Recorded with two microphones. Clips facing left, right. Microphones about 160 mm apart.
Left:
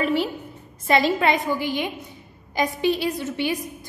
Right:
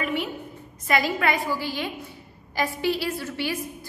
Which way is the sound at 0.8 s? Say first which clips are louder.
Left 4 dB; 25° left (ahead or behind).